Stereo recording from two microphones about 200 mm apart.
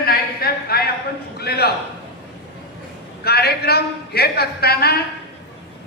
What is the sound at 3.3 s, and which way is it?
A man's voice, 50° left (ahead or behind).